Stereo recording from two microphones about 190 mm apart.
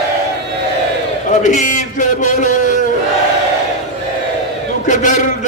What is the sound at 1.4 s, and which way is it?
A man's voice, 40° left (ahead or behind).